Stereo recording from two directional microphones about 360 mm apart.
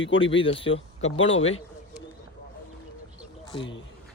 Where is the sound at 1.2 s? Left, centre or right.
Left.